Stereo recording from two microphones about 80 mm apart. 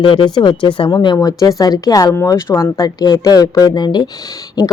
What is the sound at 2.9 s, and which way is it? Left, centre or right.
A woman's voice, left.